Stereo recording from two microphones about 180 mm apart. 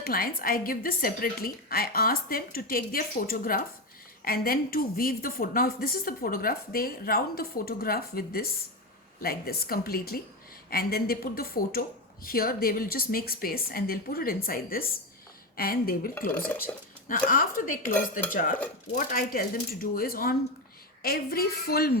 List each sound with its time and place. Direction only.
0.0 s a woman's voice: 55° left (ahead or behind)